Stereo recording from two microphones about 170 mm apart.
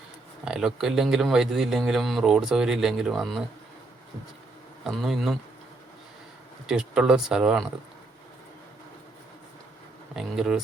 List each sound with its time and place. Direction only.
0.4 s a man's voice: 5° right (ahead or behind)
4.8 s a man's voice: centre (ahead or behind)
6.7 s a man's voice: 5° right (ahead or behind)
10.2 s a man's voice: 5° right (ahead or behind)